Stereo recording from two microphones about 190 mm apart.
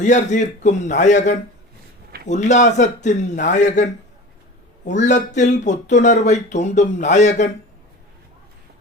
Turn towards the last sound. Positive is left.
turn(degrees=35)  # may be behind; listen again after turning